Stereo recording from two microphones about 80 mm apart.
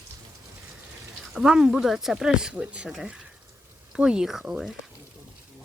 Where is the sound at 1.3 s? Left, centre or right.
Centre.